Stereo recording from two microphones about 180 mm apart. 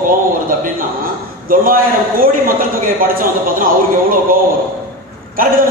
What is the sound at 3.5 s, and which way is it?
Speech, 50° right (ahead or behind).